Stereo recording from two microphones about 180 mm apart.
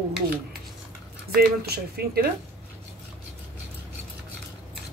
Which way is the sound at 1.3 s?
60° right (ahead or behind).